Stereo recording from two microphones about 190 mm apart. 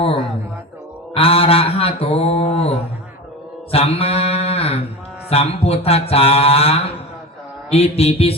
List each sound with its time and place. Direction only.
1.1 s mantra: 30° left (ahead or behind)